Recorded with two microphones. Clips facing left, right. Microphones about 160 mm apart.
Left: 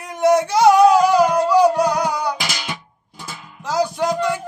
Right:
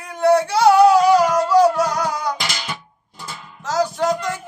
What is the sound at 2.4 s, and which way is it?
Music, centre (ahead or behind).